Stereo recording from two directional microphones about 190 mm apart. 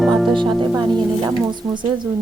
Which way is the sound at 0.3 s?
25° right (ahead or behind).